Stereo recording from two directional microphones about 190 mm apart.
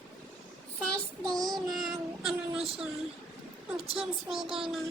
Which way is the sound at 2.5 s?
30° right (ahead or behind).